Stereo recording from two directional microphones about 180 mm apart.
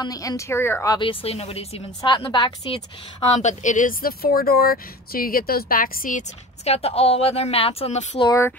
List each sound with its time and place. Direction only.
0.0 s speech: 20° left (ahead or behind)
0.9 s a woman's voice: 30° left (ahead or behind)
3.3 s speech: 45° left (ahead or behind)
8.3 s speech: 10° left (ahead or behind)